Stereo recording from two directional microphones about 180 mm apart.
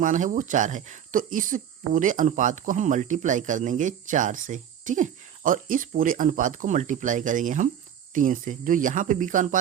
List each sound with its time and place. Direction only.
0.0 s speech: 45° right (ahead or behind)